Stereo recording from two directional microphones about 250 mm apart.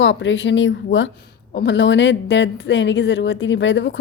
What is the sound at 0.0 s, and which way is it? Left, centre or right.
A woman's voice, left.